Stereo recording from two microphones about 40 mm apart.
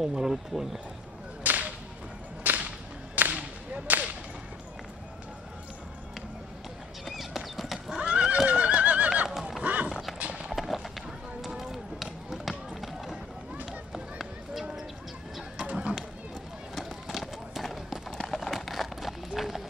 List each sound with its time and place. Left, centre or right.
0.2 s speech: centre
1.4 s whip: right
7.1 s clip-clop: centre
8.0 s neigh: right
9.6 s clip-clop: right
10.1 s horse: right
10.5 s a sound: centre
12.4 s run: centre
15.6 s a sound: right
16.7 s run: centre